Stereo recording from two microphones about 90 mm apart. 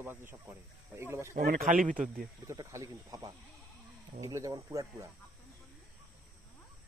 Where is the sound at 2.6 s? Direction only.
35° right (ahead or behind).